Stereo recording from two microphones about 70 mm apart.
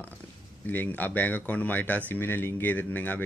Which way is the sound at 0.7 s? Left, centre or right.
Left.